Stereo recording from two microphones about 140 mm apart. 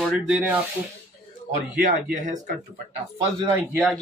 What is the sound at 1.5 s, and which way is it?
Speech, 80° right.